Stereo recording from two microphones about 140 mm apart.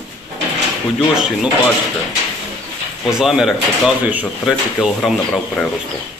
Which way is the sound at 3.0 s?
5° right (ahead or behind).